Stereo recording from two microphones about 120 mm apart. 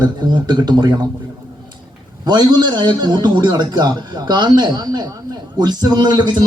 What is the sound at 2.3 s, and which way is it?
A man's voice, 35° right (ahead or behind).